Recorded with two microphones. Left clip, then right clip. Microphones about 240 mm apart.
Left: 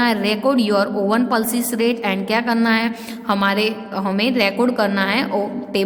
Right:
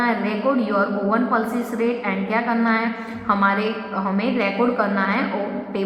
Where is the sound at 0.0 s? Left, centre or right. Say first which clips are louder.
Left 3 dB; left.